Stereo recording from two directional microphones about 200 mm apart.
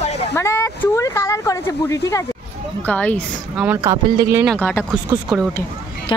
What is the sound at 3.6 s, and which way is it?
Speech, 10° right (ahead or behind).